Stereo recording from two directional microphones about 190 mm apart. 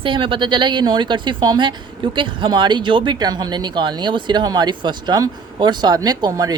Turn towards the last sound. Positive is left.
turn(degrees=-20)  # may be behind; listen again after turning